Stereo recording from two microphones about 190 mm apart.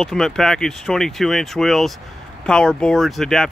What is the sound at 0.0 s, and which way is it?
Speech, centre (ahead or behind).